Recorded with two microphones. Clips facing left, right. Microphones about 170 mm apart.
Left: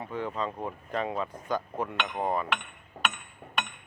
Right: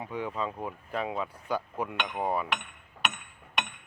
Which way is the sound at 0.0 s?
10° right (ahead or behind).